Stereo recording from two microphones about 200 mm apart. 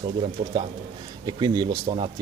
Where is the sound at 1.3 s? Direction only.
20° right (ahead or behind).